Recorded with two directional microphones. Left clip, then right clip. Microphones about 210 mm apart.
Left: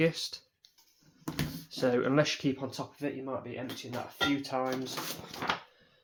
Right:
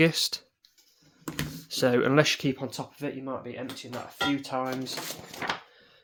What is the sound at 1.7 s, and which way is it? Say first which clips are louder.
Speech: right 5 dB; 55° right (ahead or behind).